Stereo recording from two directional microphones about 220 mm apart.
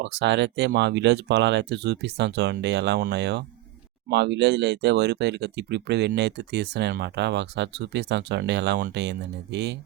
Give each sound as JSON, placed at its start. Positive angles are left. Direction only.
{"t": 0.0, "sound": "speech", "side_deg": -50}